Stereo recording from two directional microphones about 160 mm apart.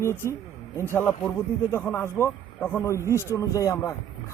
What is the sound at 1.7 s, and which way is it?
Speech, 15° left (ahead or behind).